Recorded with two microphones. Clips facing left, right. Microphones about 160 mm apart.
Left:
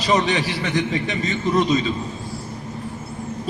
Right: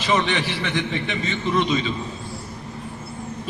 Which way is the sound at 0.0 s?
40° left (ahead or behind).